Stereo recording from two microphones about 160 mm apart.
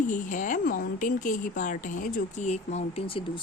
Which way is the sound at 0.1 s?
55° left (ahead or behind).